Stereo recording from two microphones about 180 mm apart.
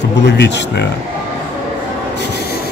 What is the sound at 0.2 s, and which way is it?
Speech, 70° left (ahead or behind).